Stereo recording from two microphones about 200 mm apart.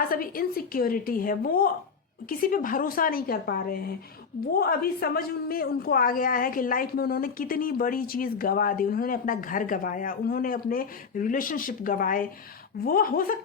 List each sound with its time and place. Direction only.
0.0 s a woman's voice: 45° left (ahead or behind)